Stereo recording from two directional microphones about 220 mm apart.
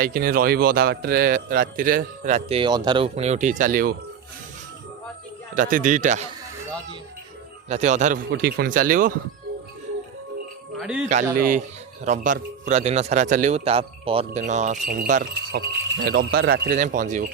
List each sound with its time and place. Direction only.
0.0 s a man's voice: 40° right (ahead or behind)
5.5 s a man's voice: 35° right (ahead or behind)
7.7 s a man's voice: 35° right (ahead or behind)
10.8 s speech: 5° right (ahead or behind)
11.3 s a man's voice: 40° right (ahead or behind)